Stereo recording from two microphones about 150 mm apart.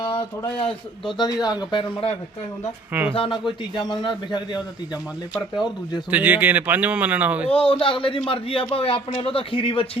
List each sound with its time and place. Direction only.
1.2 s a man's voice: 25° left (ahead or behind)
3.1 s a man's voice: 35° left (ahead or behind)
6.1 s speech: 10° right (ahead or behind)
7.5 s a man's voice: 35° left (ahead or behind)